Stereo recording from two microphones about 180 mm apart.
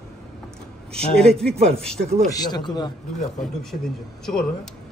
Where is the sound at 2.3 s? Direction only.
20° left (ahead or behind).